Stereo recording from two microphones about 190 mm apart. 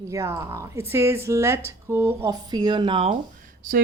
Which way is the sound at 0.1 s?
15° right (ahead or behind).